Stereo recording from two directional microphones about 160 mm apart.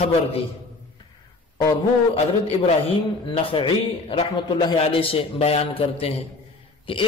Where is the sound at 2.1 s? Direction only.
40° left (ahead or behind).